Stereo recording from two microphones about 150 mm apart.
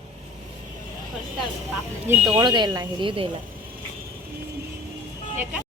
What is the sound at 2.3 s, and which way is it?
Speech, 30° right (ahead or behind).